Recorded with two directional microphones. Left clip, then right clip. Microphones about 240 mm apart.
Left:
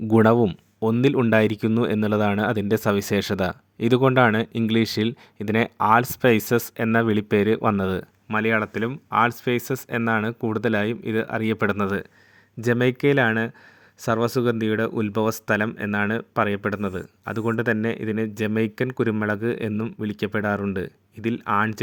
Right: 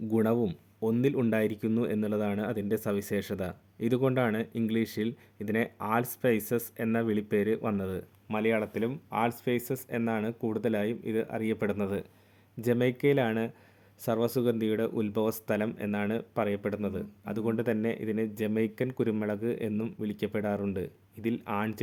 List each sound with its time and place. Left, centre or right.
0.1 s speech: left